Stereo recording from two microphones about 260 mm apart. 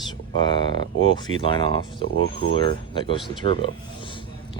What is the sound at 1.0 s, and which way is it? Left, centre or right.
Speech, centre.